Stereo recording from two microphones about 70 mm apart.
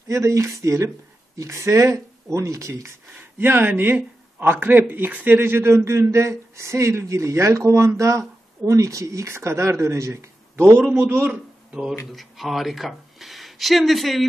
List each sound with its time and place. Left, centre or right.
0.1 s speech: right
3.2 s speech: right
12.1 s speech: centre